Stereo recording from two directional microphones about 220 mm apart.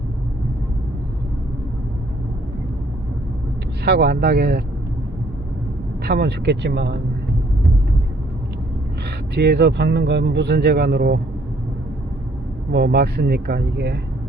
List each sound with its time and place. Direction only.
3.8 s speech: 50° right (ahead or behind)
6.1 s speech: 50° right (ahead or behind)
9.3 s speech: 50° right (ahead or behind)
12.7 s speech: 45° right (ahead or behind)